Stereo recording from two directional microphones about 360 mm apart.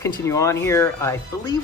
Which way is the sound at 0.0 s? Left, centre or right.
Centre.